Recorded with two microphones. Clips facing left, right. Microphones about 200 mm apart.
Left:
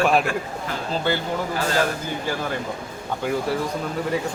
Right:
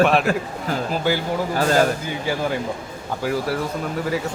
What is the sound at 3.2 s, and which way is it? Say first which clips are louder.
Speech: right 1 dB; 5° right (ahead or behind).